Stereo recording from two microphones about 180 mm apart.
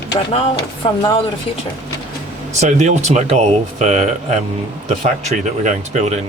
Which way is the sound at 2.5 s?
40° right (ahead or behind).